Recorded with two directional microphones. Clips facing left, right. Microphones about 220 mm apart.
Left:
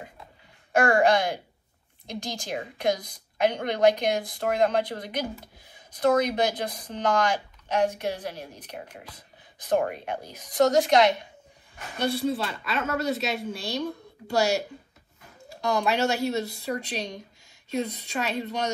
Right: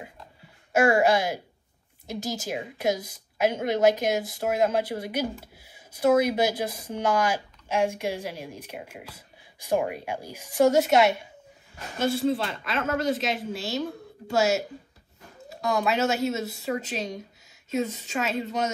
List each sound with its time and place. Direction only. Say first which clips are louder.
0.7 s a woman's voice: even; 5° right (ahead or behind)